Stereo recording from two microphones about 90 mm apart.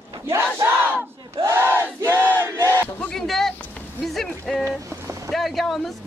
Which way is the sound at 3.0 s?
5° left (ahead or behind).